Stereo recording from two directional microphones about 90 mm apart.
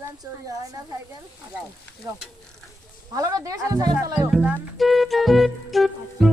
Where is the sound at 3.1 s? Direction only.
40° right (ahead or behind).